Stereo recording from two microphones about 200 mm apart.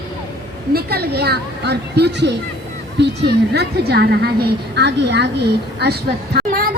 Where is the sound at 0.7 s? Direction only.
50° right (ahead or behind).